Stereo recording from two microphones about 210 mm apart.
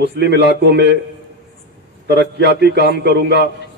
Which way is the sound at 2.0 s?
55° right (ahead or behind).